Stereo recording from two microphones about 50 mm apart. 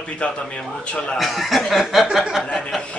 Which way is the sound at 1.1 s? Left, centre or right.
Centre.